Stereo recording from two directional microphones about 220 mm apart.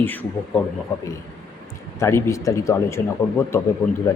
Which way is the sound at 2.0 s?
10° left (ahead or behind).